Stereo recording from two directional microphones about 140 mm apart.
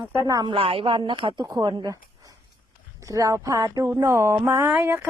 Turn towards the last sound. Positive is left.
turn(degrees=-15)  # may be behind; listen again after turning